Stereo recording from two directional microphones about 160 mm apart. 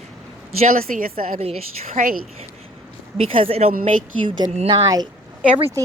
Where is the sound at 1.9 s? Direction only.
60° right (ahead or behind).